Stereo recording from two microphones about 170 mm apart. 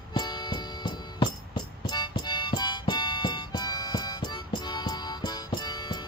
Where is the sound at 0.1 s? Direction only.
25° left (ahead or behind).